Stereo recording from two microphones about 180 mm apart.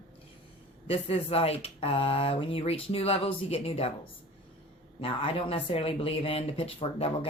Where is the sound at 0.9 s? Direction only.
35° left (ahead or behind).